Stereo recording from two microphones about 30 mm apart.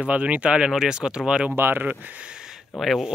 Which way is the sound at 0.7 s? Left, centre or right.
Right.